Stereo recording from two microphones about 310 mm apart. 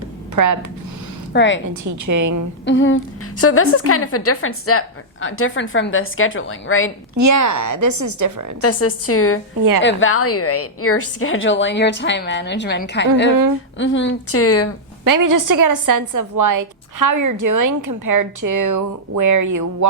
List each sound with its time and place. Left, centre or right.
0.3 s a woman's voice: right
1.3 s a woman's voice: left
1.7 s a woman's voice: right
2.6 s a woman's voice: left
7.2 s a woman's voice: right
8.6 s a woman's voice: left
15.0 s a woman's voice: right